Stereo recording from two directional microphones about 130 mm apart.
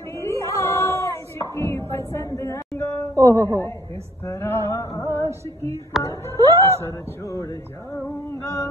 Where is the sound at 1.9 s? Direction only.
20° left (ahead or behind).